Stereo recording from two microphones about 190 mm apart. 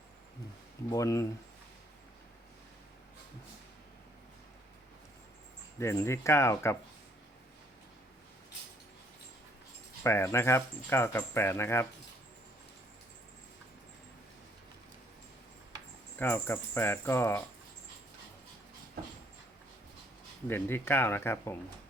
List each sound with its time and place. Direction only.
0.9 s speech: 15° left (ahead or behind)
5.8 s speech: 15° left (ahead or behind)
10.0 s speech: 15° left (ahead or behind)
16.1 s speech: 10° left (ahead or behind)
20.5 s speech: 10° left (ahead or behind)